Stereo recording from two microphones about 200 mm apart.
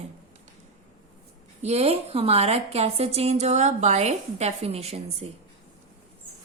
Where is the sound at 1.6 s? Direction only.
30° right (ahead or behind).